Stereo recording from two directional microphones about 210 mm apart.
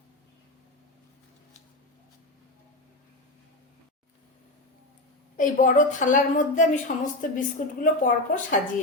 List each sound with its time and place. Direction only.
5.4 s a woman's voice: 40° left (ahead or behind)